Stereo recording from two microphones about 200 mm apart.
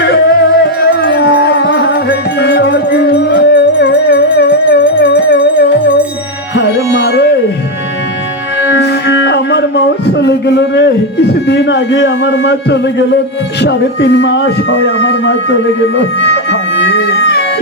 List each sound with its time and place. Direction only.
0.0 s music: 60° left (ahead or behind)
8.8 s music: 60° left (ahead or behind)
13.6 s speech: 60° left (ahead or behind)